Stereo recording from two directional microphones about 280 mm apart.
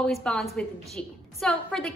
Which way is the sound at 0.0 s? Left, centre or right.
Centre.